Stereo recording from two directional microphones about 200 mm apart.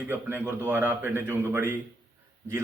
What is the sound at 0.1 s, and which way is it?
A man's voice, 10° right (ahead or behind).